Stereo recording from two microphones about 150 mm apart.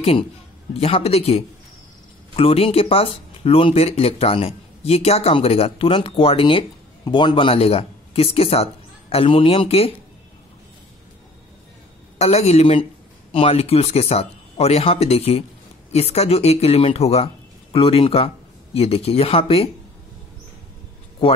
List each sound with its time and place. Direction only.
0.7 s speech: 40° left (ahead or behind)
12.2 s a man's voice: 45° left (ahead or behind)